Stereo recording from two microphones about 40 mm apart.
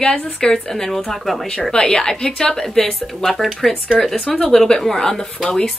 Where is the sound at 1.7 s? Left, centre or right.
Centre.